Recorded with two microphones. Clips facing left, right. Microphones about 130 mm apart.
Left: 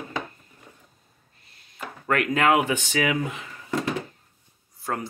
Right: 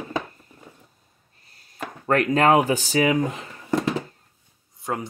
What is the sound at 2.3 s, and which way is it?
Speech, 35° right (ahead or behind).